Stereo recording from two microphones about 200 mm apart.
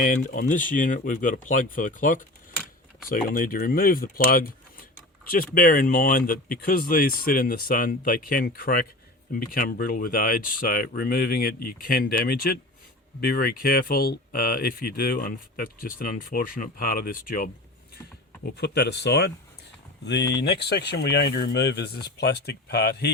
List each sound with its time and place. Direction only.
0.0 s speech: 45° left (ahead or behind)
18.4 s speech: 55° left (ahead or behind)